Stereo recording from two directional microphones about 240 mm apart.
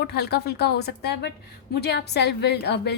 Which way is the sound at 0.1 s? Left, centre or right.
Left.